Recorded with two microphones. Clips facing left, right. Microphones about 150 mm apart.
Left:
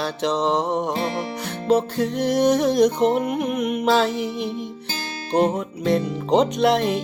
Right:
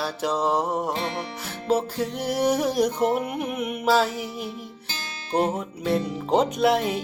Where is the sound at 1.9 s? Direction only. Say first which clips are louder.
Left 5 dB; 10° right (ahead or behind).